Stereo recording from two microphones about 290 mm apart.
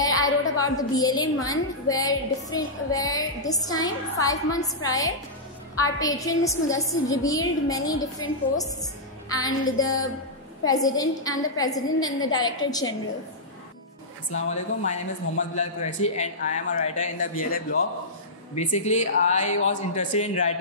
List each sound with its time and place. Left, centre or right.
0.0 s a sound: centre
1.4 s a woman's voice: centre
14.5 s a man's voice: left